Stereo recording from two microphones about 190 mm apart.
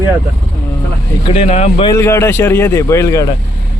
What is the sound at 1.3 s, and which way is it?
Speech, 35° left (ahead or behind).